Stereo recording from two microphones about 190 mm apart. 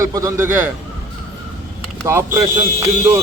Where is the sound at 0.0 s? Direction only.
15° right (ahead or behind).